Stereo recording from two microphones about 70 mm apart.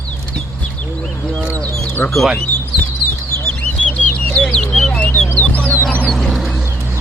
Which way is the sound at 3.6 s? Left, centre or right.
Centre.